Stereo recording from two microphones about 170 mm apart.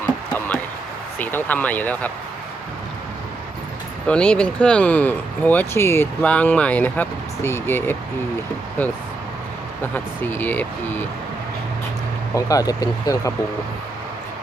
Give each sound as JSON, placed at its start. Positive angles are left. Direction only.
{"t": 0.3, "sound": "a sound", "side_deg": 10}
{"t": 1.2, "sound": "speech", "side_deg": 10}
{"t": 4.0, "sound": "speech", "side_deg": 5}
{"t": 12.3, "sound": "speech", "side_deg": 20}